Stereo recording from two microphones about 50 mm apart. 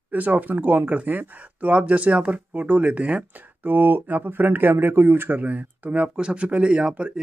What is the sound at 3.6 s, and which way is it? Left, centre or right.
Speech, right.